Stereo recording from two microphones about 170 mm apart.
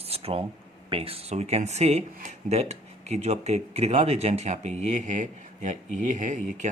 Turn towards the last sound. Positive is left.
turn(degrees=-45)  # may be behind; listen again after turning